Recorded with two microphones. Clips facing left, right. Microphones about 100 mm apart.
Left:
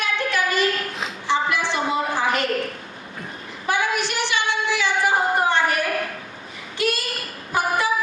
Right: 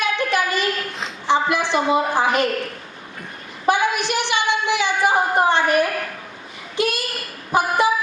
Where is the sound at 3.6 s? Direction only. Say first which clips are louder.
Right 4 dB; 20° right (ahead or behind).